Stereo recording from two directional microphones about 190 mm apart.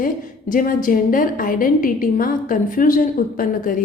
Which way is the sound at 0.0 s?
45° left (ahead or behind).